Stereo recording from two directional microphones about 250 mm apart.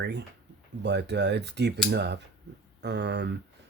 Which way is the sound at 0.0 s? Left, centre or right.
Right.